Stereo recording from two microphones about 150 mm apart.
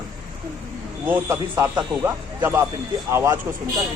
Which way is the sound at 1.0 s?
15° right (ahead or behind).